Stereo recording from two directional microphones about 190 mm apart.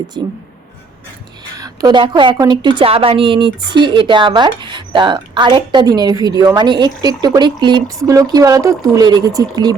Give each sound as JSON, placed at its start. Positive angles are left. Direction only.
{"t": 0.1, "sound": "a woman's voice", "side_deg": -25}
{"t": 1.5, "sound": "a woman's voice", "side_deg": -20}